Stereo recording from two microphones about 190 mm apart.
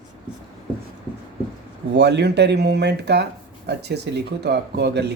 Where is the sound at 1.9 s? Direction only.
60° right (ahead or behind).